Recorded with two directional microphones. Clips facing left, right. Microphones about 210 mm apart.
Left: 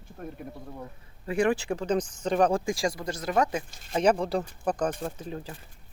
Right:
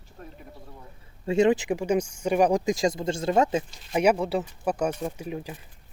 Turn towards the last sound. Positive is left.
turn(degrees=-10)  # may be behind; listen again after turning